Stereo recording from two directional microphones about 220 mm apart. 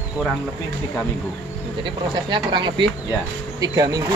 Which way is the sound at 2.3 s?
20° right (ahead or behind).